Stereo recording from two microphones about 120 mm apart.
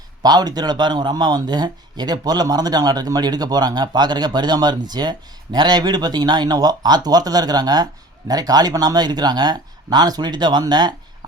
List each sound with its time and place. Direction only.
0.2 s a man's voice: 35° right (ahead or behind)